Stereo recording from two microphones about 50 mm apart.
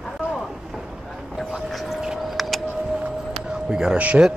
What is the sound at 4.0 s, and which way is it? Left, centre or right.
Speech, right.